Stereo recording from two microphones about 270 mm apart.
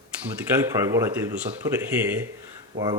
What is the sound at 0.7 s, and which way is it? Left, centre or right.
Speech, centre.